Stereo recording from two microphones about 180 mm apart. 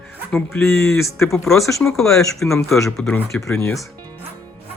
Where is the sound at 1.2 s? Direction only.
Centre (ahead or behind).